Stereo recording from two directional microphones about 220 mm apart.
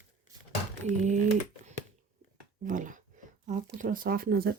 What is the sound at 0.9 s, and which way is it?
Speech, 35° right (ahead or behind).